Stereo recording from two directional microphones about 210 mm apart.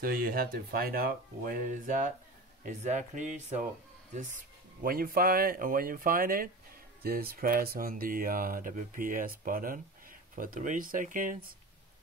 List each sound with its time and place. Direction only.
0.0 s speech: 45° right (ahead or behind)